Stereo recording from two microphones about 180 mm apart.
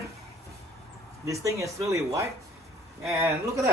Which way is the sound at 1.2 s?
15° right (ahead or behind).